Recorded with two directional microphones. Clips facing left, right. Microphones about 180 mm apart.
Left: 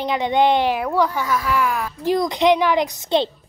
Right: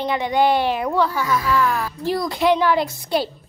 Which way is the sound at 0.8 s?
5° left (ahead or behind).